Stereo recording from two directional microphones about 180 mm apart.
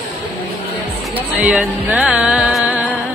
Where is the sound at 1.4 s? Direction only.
10° right (ahead or behind).